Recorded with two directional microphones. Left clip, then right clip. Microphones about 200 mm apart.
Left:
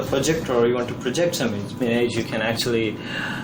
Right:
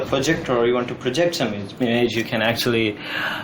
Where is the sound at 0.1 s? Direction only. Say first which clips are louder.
Right 1 dB; 15° right (ahead or behind).